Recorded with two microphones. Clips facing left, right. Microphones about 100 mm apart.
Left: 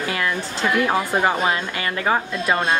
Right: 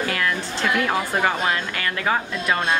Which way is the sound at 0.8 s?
15° left (ahead or behind).